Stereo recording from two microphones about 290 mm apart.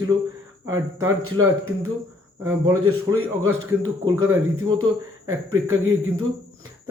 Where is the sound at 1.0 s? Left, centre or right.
Right.